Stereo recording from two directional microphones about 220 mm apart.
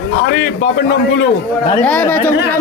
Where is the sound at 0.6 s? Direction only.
55° left (ahead or behind).